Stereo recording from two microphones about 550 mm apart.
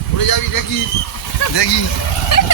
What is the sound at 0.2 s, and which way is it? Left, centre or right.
Speech, left.